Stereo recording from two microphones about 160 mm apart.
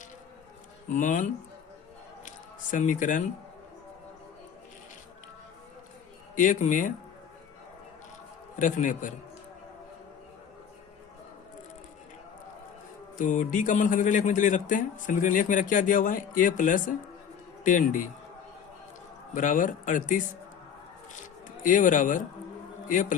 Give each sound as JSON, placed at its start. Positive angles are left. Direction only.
{"t": 0.9, "sound": "speech", "side_deg": 50}
{"t": 6.3, "sound": "speech", "side_deg": 55}
{"t": 8.5, "sound": "speech", "side_deg": 50}
{"t": 13.1, "sound": "a man's voice", "side_deg": 50}
{"t": 19.3, "sound": "speech", "side_deg": 55}
{"t": 21.6, "sound": "speech", "side_deg": 55}